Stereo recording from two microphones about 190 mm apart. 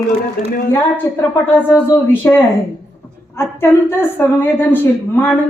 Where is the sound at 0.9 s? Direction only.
10° left (ahead or behind).